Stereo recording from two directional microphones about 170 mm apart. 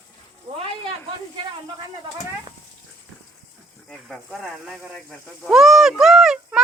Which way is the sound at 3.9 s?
Centre (ahead or behind).